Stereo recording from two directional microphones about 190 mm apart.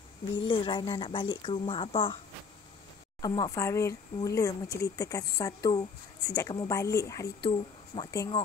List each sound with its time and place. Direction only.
0.5 s speech: 25° left (ahead or behind)
3.2 s speech: 20° left (ahead or behind)